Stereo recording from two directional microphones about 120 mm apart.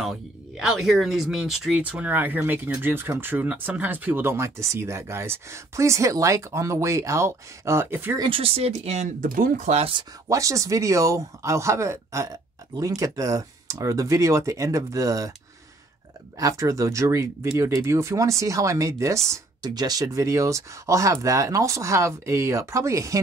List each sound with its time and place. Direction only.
0.0 s speech: 5° right (ahead or behind)
8.2 s speech: 50° right (ahead or behind)
10.2 s speech: 25° right (ahead or behind)
16.3 s speech: 30° right (ahead or behind)